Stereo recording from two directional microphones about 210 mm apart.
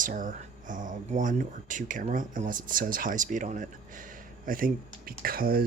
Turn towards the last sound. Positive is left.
turn(degrees=-45)  # may be behind; listen again after turning